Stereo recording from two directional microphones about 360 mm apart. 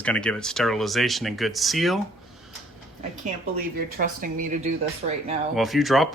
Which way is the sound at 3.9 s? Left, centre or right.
Right.